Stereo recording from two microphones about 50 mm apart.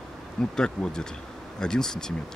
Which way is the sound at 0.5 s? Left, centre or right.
Centre.